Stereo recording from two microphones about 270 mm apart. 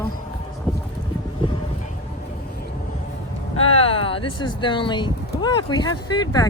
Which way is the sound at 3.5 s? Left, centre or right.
Centre.